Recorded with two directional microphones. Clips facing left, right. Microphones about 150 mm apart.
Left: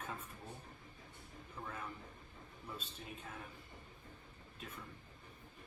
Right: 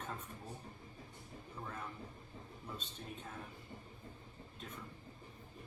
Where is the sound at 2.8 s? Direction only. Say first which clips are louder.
Right 2 dB; 10° left (ahead or behind).